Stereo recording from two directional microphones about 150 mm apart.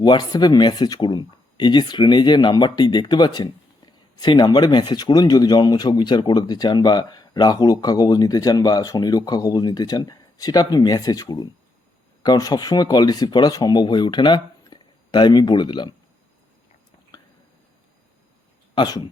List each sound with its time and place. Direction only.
0.0 s speech: 30° left (ahead or behind)
18.7 s speech: 30° left (ahead or behind)